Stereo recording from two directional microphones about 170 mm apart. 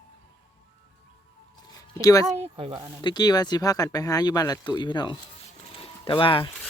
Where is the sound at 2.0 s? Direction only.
20° left (ahead or behind).